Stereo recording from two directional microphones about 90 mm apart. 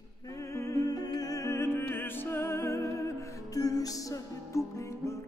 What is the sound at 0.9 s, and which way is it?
Music, 45° left (ahead or behind).